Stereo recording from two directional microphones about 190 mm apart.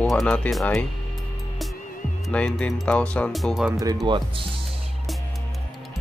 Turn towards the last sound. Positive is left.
turn(degrees=-25)  # may be behind; listen again after turning